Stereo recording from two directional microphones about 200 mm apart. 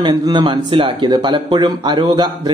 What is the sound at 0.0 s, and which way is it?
Speech, 20° right (ahead or behind).